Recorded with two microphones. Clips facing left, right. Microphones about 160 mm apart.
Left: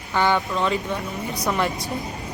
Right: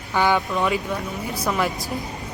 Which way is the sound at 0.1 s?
10° right (ahead or behind).